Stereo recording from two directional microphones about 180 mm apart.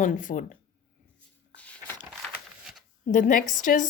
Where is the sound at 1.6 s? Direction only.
10° left (ahead or behind).